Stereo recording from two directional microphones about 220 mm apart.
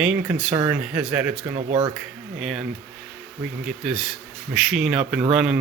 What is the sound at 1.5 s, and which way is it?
Speech, 25° right (ahead or behind).